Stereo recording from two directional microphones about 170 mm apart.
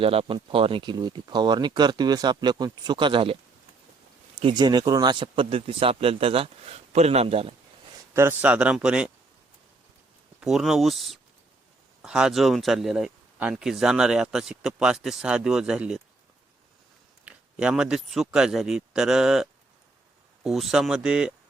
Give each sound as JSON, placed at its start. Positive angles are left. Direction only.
{"t": 0.0, "sound": "speech", "side_deg": -35}
{"t": 4.4, "sound": "speech", "side_deg": -30}
{"t": 8.1, "sound": "speech", "side_deg": -15}
{"t": 10.4, "sound": "speech", "side_deg": 0}
{"t": 17.2, "sound": "speech", "side_deg": -5}